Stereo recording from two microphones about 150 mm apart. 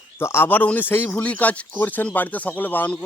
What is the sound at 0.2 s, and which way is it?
Speech, 15° left (ahead or behind).